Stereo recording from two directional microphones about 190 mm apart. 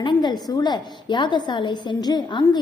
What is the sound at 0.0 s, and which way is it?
A woman's voice, 25° left (ahead or behind).